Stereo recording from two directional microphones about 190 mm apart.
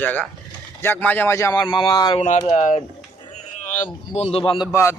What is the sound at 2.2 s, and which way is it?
Speech, 35° left (ahead or behind).